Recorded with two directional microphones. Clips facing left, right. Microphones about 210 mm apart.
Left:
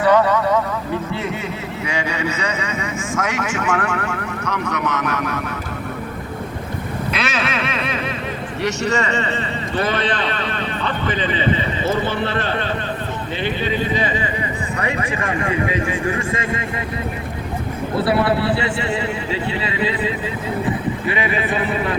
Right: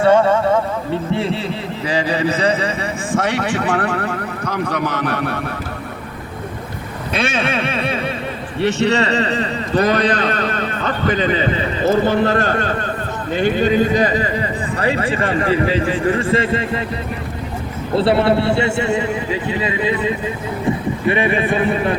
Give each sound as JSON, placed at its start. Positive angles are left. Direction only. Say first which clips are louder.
{"t": 0.0, "sound": "vehicle", "louder": "right 2 dB", "side_deg": -25}
{"t": 1.1, "sound": "speech", "louder": "right 5 dB", "side_deg": -30}
{"t": 7.2, "sound": "a man's voice", "louder": "right 6 dB", "side_deg": -30}
{"t": 18.2, "sound": "a man's voice", "louder": "right 3 dB", "side_deg": -25}